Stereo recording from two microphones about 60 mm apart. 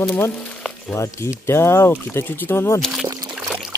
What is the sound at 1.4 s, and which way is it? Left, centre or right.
Speech, left.